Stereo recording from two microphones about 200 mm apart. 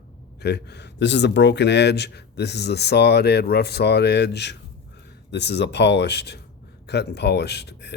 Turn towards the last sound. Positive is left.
turn(degrees=55)  # may be behind; listen again after turning